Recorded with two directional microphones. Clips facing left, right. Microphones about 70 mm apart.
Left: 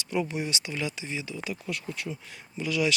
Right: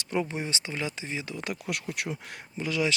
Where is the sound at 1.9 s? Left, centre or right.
Right.